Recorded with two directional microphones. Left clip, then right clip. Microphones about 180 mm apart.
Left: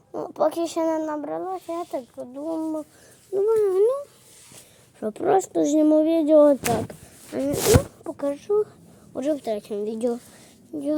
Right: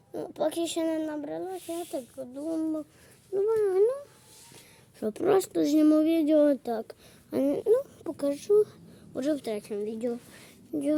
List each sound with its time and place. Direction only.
0.1 s speech: 5° left (ahead or behind)
3.3 s speech: 25° left (ahead or behind)
3.8 s speech: 15° left (ahead or behind)
4.9 s a sound: 15° right (ahead or behind)
5.5 s speech: 5° right (ahead or behind)
5.8 s a sound: 15° right (ahead or behind)
8.0 s speech: 15° right (ahead or behind)
9.1 s speech: 5° right (ahead or behind)
9.8 s speech: 20° left (ahead or behind)
10.7 s speech: 25° right (ahead or behind)